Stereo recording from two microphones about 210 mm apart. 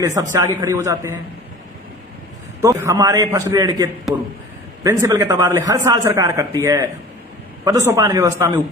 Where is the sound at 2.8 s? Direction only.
15° right (ahead or behind).